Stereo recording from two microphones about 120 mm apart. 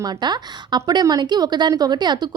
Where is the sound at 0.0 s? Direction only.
35° right (ahead or behind).